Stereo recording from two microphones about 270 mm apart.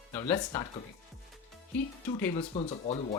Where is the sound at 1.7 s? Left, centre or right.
Centre.